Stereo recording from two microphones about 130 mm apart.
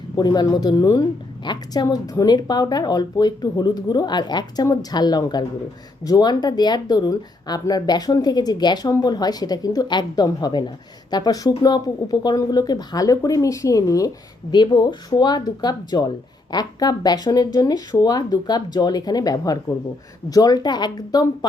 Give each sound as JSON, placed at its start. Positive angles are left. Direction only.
{"t": 0.2, "sound": "speech", "side_deg": 30}